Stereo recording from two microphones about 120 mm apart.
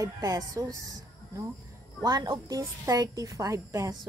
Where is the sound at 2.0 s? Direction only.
35° right (ahead or behind).